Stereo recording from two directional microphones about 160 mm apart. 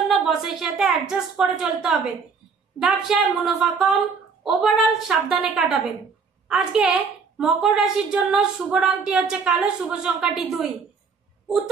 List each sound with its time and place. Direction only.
0.1 s a woman's voice: centre (ahead or behind)